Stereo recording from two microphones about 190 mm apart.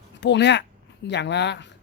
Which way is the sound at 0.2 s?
65° left (ahead or behind).